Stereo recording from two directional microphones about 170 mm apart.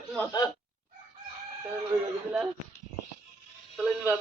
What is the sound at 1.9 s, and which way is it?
Speech, 15° right (ahead or behind).